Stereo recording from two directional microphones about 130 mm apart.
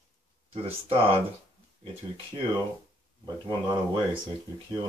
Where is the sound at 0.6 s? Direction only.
45° right (ahead or behind).